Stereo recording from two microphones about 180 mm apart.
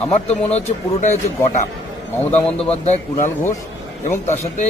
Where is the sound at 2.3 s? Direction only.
10° left (ahead or behind).